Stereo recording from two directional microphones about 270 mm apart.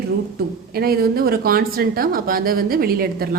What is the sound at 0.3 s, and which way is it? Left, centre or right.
Speech, right.